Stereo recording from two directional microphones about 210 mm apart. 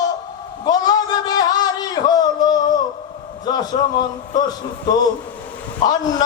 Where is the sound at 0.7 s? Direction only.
20° left (ahead or behind).